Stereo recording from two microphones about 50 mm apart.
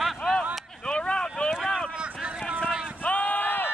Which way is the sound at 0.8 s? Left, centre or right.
Left.